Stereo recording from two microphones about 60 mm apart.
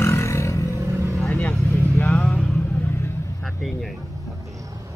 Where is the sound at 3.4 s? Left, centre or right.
Centre.